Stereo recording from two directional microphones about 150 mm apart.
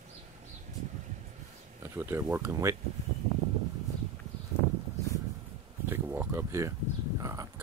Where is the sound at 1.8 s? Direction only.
15° right (ahead or behind).